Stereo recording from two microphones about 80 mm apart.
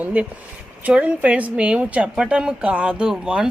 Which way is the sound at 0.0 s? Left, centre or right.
Right.